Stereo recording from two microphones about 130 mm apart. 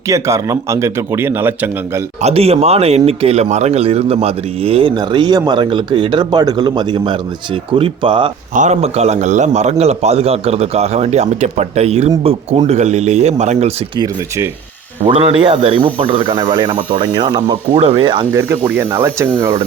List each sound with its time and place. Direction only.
0.1 s speech: 25° right (ahead or behind)
2.2 s speech: 50° right (ahead or behind)
4.9 s a man's voice: 35° right (ahead or behind)
8.5 s a man's voice: 65° right (ahead or behind)
15.0 s speech: 45° right (ahead or behind)
16.3 s a man's voice: 30° right (ahead or behind)
18.3 s speech: 20° right (ahead or behind)